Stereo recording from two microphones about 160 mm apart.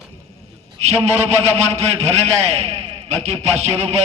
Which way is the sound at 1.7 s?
45° right (ahead or behind).